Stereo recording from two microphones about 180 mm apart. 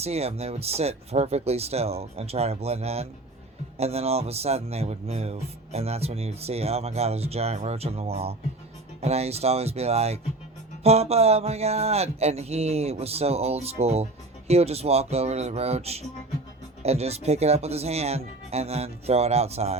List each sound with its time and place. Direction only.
0.0 s speech: 35° right (ahead or behind)